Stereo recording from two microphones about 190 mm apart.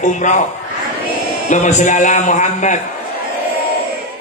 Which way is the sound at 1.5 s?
40° left (ahead or behind).